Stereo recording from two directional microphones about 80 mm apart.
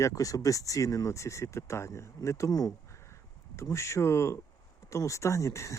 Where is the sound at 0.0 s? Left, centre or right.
Left.